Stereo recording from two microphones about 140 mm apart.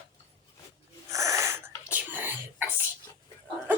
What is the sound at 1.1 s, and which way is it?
Wheeze, 20° right (ahead or behind).